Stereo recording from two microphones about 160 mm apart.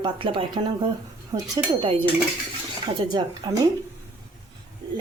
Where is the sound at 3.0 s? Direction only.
30° right (ahead or behind).